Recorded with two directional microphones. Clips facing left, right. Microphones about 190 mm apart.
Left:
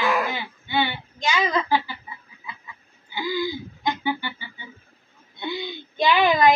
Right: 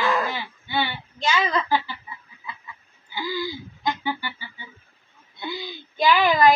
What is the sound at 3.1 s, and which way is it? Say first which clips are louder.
Music: left 3 dB; 15° left (ahead or behind).